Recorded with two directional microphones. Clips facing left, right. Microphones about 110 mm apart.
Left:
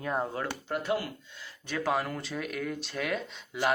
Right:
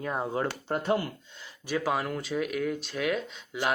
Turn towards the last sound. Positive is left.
turn(degrees=0)  # may be behind; listen again after turning